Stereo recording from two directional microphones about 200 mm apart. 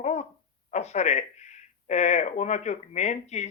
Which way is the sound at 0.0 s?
35° left (ahead or behind).